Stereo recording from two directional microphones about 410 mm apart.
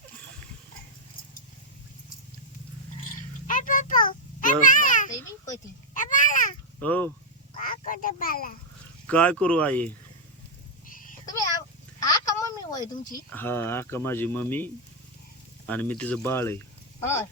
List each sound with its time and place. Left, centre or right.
3.5 s a sound: centre
5.9 s babbling: centre
6.8 s speech: centre
7.6 s duck: centre
9.0 s speech: centre
11.9 s a sound: centre
13.3 s speech: centre